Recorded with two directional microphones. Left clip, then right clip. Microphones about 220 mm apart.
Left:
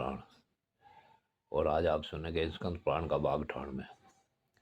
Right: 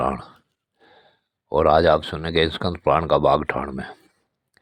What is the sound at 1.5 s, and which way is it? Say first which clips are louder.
Speech: right 15 dB; 40° right (ahead or behind).